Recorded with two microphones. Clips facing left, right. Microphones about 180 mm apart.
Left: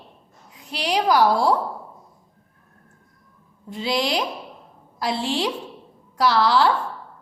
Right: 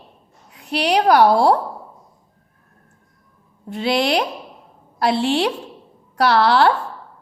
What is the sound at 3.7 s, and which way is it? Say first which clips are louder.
A woman's voice: right 5 dB; 65° right (ahead or behind).